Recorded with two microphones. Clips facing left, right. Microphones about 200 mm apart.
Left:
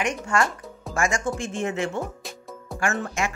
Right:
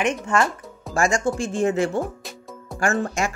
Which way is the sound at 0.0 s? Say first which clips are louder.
Right 3 dB; 20° right (ahead or behind).